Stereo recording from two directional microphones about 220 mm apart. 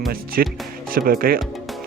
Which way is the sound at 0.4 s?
45° right (ahead or behind).